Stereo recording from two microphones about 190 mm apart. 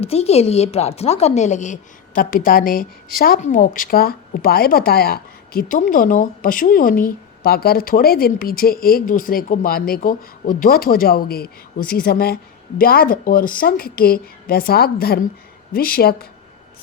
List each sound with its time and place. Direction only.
0.0 s a woman's voice: 30° left (ahead or behind); by 16.1 s 50° left (ahead or behind)